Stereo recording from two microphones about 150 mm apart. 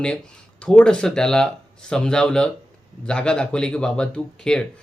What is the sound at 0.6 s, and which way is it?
Speech, 5° left (ahead or behind).